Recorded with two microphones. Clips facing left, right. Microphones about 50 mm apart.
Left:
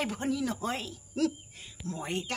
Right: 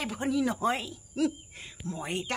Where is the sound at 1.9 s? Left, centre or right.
Centre.